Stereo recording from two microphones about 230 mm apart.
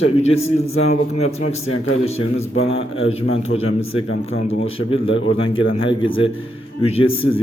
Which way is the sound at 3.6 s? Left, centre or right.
Left.